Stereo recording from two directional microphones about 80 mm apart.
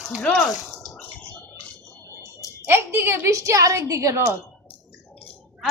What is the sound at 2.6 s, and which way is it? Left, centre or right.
A woman's voice, right.